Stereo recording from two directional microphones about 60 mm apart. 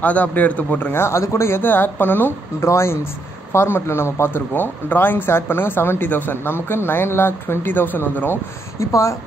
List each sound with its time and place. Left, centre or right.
0.0 s speech: left
1.6 s speech: left
2.6 s speech: left
8.7 s speech: left